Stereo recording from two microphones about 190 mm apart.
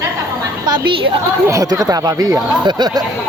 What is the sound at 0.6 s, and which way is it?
Speech, 25° right (ahead or behind).